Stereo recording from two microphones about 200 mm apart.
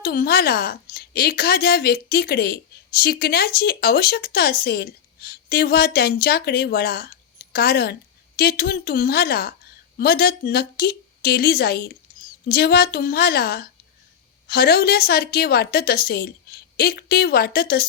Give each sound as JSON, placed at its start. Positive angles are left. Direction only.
{"t": 0.0, "sound": "a woman's voice", "side_deg": 50}